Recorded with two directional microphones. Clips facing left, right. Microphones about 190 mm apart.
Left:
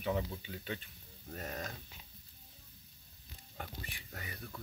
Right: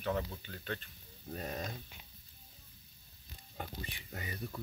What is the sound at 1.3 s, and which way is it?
Speech, 15° right (ahead or behind).